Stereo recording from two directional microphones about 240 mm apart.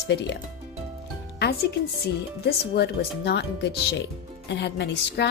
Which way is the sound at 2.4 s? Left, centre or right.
Left.